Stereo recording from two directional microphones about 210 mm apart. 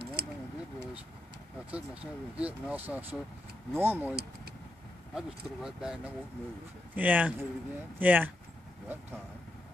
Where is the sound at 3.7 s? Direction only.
10° right (ahead or behind).